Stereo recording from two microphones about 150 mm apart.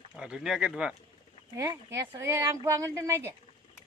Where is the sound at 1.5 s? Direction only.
20° right (ahead or behind).